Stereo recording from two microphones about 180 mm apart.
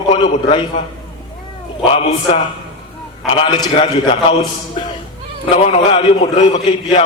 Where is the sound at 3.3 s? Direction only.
30° left (ahead or behind).